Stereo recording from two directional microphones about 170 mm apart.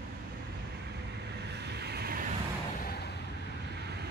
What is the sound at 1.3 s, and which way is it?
Vehicle, 80° right.